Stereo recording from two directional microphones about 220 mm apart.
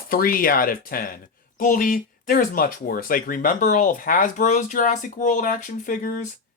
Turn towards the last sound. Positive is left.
turn(degrees=35)  # may be behind; listen again after turning